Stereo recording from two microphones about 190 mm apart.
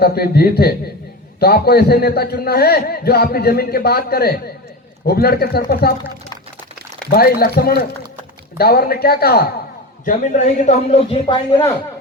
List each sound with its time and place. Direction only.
0.0 s a man's voice: 55° left (ahead or behind)
7.1 s a man's voice: 55° left (ahead or behind)
10.1 s a man's voice: 40° left (ahead or behind)